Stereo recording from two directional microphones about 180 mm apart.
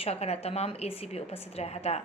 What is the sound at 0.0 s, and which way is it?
A woman's voice, 35° left (ahead or behind).